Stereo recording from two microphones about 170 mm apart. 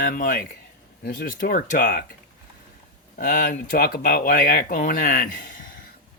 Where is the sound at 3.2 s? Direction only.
50° left (ahead or behind).